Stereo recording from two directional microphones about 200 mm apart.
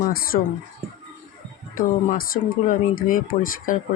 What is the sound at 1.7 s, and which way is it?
Speech, 45° left (ahead or behind).